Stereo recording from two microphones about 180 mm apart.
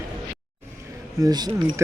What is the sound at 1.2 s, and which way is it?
Speech, 20° right (ahead or behind).